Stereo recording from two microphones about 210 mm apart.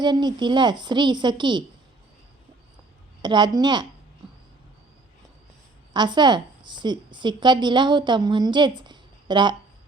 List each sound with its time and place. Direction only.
0.0 s a woman's voice: 20° right (ahead or behind)
3.2 s a woman's voice: 20° right (ahead or behind)
5.9 s a woman's voice: 20° right (ahead or behind)